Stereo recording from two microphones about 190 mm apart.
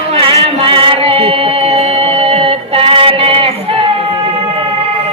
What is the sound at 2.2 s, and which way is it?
Music, 30° right (ahead or behind).